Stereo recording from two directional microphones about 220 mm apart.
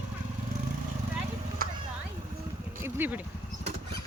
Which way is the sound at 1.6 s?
40° right (ahead or behind).